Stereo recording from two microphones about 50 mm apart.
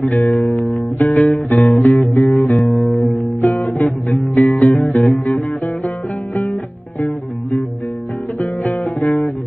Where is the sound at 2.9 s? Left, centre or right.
Left.